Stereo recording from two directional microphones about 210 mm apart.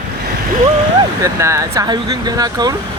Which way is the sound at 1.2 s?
15° right (ahead or behind).